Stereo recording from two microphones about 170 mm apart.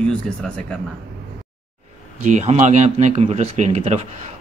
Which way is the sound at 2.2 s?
45° right (ahead or behind).